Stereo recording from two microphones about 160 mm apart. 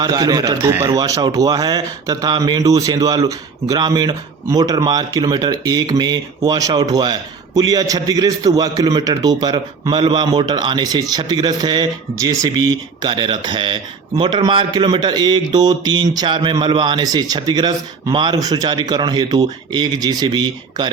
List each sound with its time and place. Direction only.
0.0 s a man's voice: 25° right (ahead or behind)